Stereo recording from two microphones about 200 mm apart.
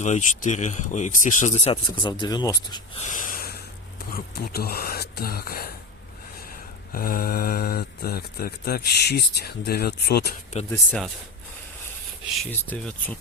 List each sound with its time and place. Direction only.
0.0 s speech: 35° left (ahead or behind); by 2.6 s 20° left (ahead or behind)
3.0 s snort: 40° left (ahead or behind)
4.1 s speech: 50° left (ahead or behind)
6.9 s speech: 45° left (ahead or behind)
10.7 s speech: 5° left (ahead or behind)
12.4 s speech: 5° left (ahead or behind)